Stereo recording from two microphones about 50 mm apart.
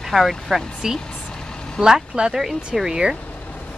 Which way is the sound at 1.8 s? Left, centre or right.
Centre.